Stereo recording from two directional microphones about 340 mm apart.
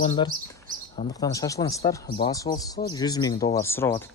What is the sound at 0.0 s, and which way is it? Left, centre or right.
Speech, centre.